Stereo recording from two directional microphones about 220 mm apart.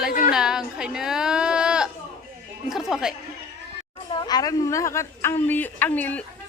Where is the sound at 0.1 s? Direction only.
40° left (ahead or behind).